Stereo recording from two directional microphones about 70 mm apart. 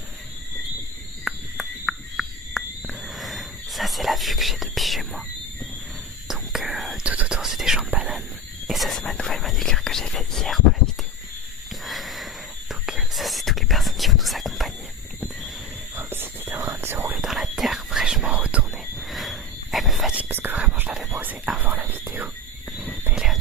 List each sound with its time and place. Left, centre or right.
1.5 s a sound: centre
6.2 s whispering: centre
6.9 s whispering: centre
7.3 s speech: centre
11.9 s sniff: centre
12.8 s whispering: centre
16.0 s whispering: right
17.2 s whispering: centre
18.9 s a sound: centre
20.1 s whispering: right
21.1 s speech: right
21.6 s whispering: right
22.8 s a sound: right
23.1 s horse: centre